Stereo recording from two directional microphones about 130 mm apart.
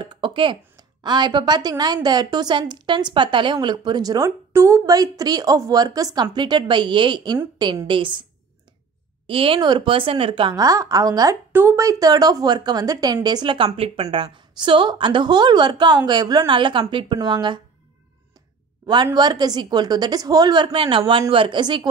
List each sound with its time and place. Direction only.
0.0 s a woman's voice: 40° right (ahead or behind)
9.3 s a woman's voice: 45° right (ahead or behind)
10.5 s a woman's voice: 25° right (ahead or behind)
13.7 s a woman's voice: 50° right (ahead or behind)
19.1 s a woman's voice: 30° right (ahead or behind)